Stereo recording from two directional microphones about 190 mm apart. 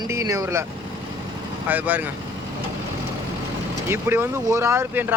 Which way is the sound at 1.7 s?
10° right (ahead or behind).